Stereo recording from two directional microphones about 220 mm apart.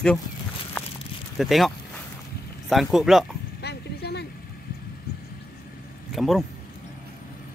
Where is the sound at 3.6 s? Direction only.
50° left (ahead or behind).